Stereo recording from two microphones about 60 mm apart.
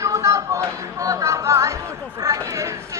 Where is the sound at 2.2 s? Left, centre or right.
Right.